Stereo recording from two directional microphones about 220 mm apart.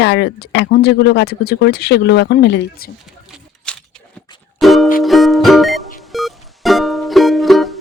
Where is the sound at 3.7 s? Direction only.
5° left (ahead or behind).